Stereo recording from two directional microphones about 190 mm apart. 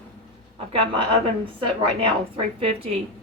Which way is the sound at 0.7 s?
30° right (ahead or behind).